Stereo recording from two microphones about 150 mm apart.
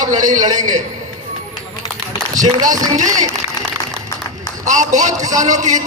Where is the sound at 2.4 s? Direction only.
60° right (ahead or behind).